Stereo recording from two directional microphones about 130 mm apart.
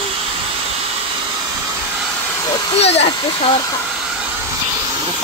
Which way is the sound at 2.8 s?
50° left (ahead or behind).